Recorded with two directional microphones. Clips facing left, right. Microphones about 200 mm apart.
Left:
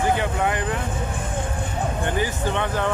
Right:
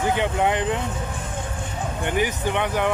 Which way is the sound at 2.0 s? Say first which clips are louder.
Right 4 dB; 15° right (ahead or behind).